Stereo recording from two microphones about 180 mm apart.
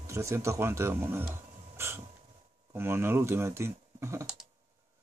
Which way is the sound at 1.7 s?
15° right (ahead or behind).